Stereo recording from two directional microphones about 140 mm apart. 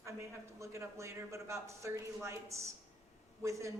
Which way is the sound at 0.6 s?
20° right (ahead or behind).